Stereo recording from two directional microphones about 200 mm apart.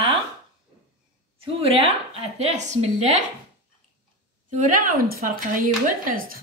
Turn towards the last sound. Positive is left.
turn(degrees=-45)  # may be behind; listen again after turning